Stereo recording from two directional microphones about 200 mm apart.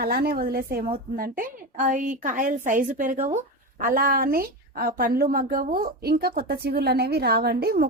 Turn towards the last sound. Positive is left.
turn(degrees=-50)  # may be behind; listen again after turning